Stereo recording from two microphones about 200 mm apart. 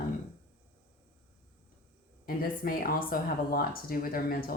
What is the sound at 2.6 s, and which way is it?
Speech, 45° left (ahead or behind).